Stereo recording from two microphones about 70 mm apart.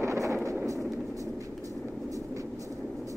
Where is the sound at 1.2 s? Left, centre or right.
Right.